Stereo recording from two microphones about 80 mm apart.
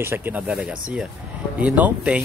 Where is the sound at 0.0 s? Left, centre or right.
Right.